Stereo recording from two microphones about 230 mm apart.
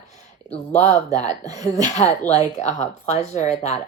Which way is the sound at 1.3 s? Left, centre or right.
Centre.